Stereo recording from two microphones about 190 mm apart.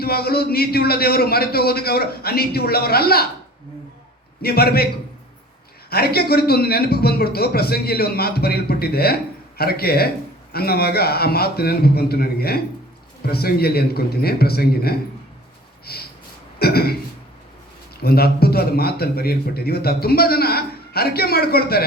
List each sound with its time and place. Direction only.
0.0 s a man's voice: 55° left (ahead or behind)
4.4 s a man's voice: 55° left (ahead or behind)
5.9 s a man's voice: 55° left (ahead or behind)
18.0 s a man's voice: 55° left (ahead or behind)